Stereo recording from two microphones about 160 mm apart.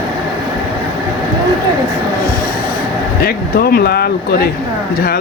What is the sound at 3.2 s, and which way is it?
Speech, 75° left (ahead or behind).